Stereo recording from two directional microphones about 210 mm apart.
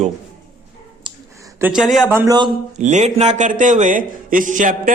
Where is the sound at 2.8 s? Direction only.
35° right (ahead or behind).